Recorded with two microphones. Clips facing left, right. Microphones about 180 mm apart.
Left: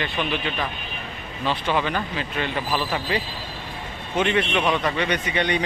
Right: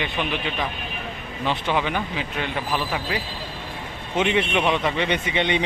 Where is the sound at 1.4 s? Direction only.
15° right (ahead or behind).